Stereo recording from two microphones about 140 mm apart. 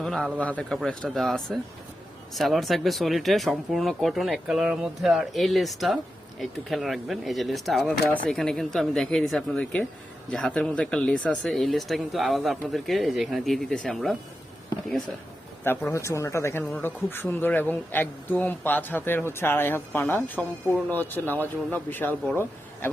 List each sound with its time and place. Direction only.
0.0 s a sound: 5° left (ahead or behind)
0.3 s speech: 10° left (ahead or behind)
15.6 s speech: 15° left (ahead or behind)